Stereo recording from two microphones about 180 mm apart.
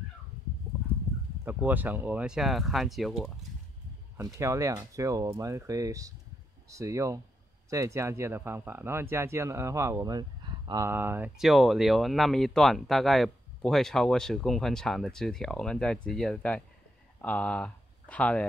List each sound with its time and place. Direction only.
1.4 s speech: 10° right (ahead or behind)
4.2 s speech: 15° right (ahead or behind); by 18.4 s 5° left (ahead or behind)